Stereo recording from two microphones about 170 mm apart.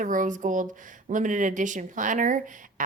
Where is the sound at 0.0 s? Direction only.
50° right (ahead or behind).